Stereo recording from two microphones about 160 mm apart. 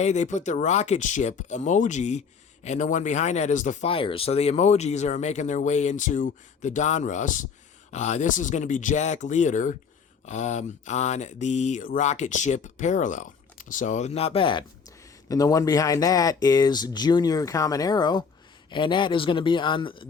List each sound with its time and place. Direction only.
0.0 s speech: 45° left (ahead or behind); by 20.1 s 30° left (ahead or behind)